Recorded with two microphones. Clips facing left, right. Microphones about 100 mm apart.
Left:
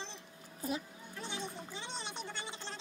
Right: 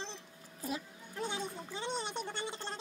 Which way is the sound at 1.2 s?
50° right (ahead or behind).